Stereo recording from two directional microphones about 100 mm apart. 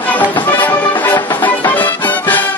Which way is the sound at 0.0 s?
15° left (ahead or behind).